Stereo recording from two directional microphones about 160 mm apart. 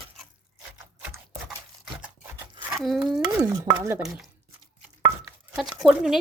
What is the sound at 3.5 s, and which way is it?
Stir, 20° right (ahead or behind).